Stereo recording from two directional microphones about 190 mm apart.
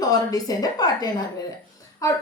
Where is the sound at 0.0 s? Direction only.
20° left (ahead or behind).